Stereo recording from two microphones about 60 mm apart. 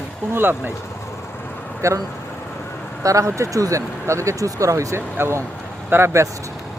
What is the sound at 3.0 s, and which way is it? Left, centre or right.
Speech, right.